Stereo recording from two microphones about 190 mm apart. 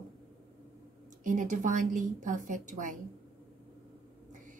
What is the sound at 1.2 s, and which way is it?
Speech, 40° right (ahead or behind).